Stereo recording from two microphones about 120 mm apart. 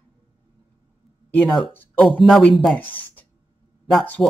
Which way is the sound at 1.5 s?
Centre (ahead or behind).